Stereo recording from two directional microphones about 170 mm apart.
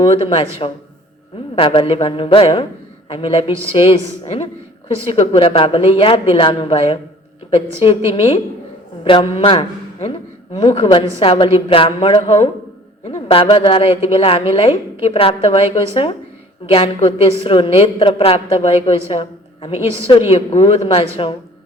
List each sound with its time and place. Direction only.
0.0 s a woman's voice: 35° left (ahead or behind)
1.5 s a woman's voice: 30° left (ahead or behind)